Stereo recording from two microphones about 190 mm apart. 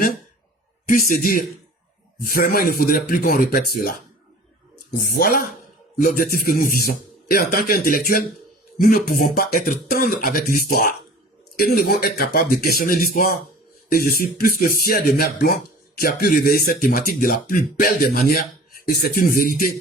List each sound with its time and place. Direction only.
0.9 s speech: 45° left (ahead or behind)